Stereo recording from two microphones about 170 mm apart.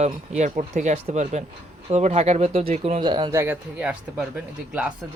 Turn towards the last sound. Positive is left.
turn(degrees=-5)  # may be behind; listen again after turning